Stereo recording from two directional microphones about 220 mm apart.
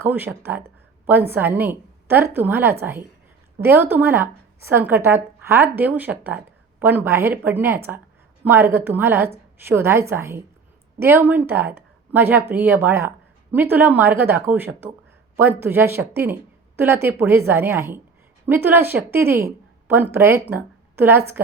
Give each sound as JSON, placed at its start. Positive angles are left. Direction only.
{"t": 0.0, "sound": "a woman's voice", "side_deg": -10}